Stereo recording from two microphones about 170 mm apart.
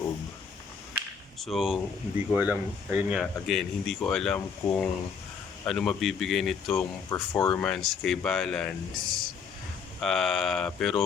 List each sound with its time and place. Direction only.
1.4 s speech: centre (ahead or behind)
7.1 s speech: 15° left (ahead or behind)
7.6 s speech: 5° left (ahead or behind)